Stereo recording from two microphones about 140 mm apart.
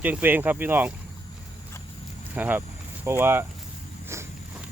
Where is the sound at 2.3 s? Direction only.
10° right (ahead or behind).